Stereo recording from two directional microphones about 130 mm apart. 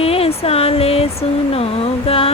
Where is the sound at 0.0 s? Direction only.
50° left (ahead or behind).